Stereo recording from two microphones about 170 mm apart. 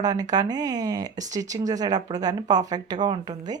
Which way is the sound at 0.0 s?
20° right (ahead or behind).